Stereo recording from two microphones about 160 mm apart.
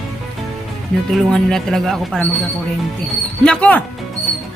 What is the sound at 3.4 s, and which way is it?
Speech, 5° left (ahead or behind).